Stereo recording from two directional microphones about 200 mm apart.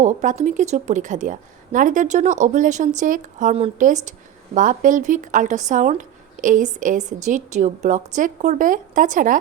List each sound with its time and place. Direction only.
0.0 s a woman's voice: 35° right (ahead or behind)